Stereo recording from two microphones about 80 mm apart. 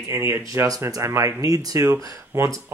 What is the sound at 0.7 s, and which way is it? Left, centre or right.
Speech, right.